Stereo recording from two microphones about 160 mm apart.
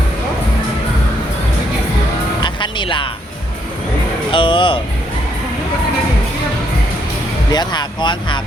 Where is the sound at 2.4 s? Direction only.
30° left (ahead or behind).